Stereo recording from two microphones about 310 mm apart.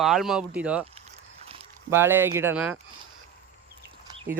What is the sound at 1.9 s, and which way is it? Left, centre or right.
Speech, centre.